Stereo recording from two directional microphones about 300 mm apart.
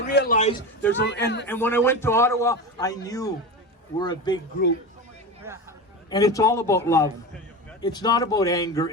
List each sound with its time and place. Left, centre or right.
0.1 s a man's voice: left
0.8 s speech: centre
1.1 s a man's voice: left
1.5 s a man's voice: centre
5.5 s speech: centre
6.1 s a man's voice: centre